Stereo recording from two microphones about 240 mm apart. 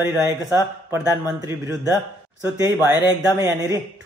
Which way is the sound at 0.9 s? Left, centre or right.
Centre.